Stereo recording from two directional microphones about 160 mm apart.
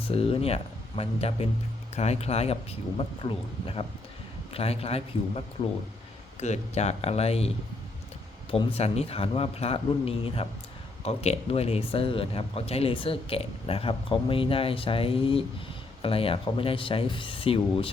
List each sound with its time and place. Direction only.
0.0 s speech: 35° left (ahead or behind)
6.4 s speech: 45° left (ahead or behind)